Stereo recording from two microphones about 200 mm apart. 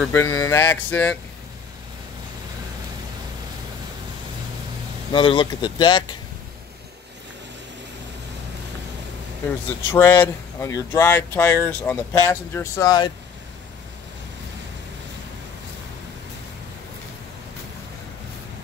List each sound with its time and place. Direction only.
0.0 s speech: 10° left (ahead or behind)
5.1 s speech: 25° left (ahead or behind)
9.8 s speech: 10° left (ahead or behind)